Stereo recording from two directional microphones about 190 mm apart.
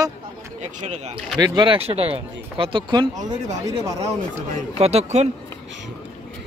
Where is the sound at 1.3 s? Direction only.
20° right (ahead or behind).